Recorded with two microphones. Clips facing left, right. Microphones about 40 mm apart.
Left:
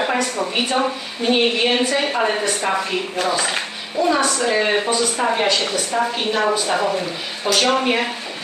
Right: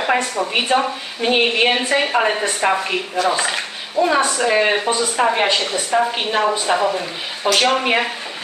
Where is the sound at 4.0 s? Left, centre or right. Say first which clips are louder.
Right 2 dB; right.